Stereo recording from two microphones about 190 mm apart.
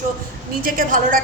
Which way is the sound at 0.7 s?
45° right (ahead or behind).